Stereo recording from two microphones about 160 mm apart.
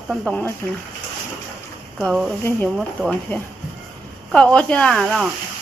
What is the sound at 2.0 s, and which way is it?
Speech, 5° left (ahead or behind).